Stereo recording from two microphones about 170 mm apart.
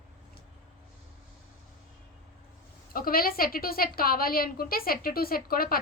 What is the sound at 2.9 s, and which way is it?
A woman's voice, 60° left (ahead or behind).